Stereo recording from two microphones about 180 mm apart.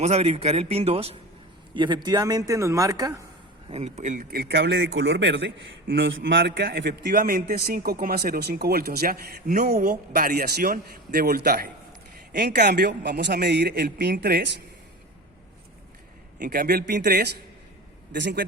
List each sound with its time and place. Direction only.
0.0 s a man's voice: 35° right (ahead or behind); by 3.2 s 20° right (ahead or behind)
3.7 s a man's voice: 35° right (ahead or behind); by 5.5 s 80° right
5.9 s a man's voice: 90° right; by 14.6 s 70° right (ahead or behind)
16.4 s a man's voice: 55° right (ahead or behind)
18.1 s a man's voice: 70° right (ahead or behind)